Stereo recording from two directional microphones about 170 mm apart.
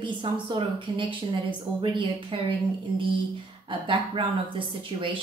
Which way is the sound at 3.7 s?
30° right (ahead or behind).